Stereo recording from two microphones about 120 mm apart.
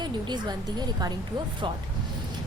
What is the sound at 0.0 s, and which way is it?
A woman's voice, 35° right (ahead or behind).